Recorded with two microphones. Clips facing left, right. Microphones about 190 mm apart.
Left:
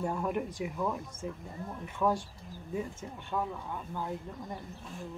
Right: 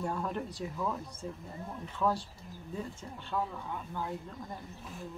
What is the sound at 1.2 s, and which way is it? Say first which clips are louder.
Speech: left 2 dB; 15° left (ahead or behind).